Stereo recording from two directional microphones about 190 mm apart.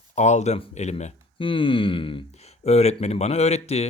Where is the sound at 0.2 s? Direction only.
40° left (ahead or behind).